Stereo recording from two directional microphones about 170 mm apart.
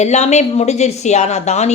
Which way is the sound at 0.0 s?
40° left (ahead or behind).